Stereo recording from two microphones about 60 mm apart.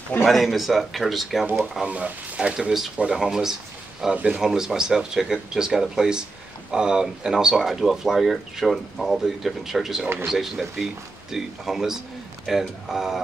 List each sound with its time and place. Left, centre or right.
0.2 s a man's voice: centre
1.9 s speech: right
3.1 s speech: centre
4.1 s speech: centre
4.4 s a man's voice: centre